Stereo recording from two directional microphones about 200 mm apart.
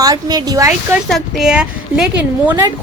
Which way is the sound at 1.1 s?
Centre (ahead or behind).